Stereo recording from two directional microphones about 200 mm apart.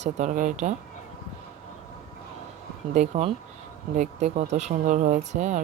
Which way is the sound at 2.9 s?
35° right (ahead or behind).